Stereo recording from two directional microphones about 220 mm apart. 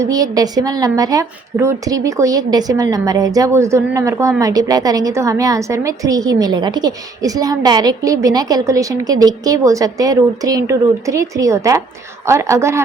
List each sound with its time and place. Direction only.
0.0 s a woman's voice: 15° right (ahead or behind)